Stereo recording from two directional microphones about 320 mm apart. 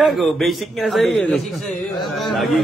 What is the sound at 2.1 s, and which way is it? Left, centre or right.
Speech, centre.